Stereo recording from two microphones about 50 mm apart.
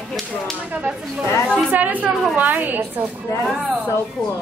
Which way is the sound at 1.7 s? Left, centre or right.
Right.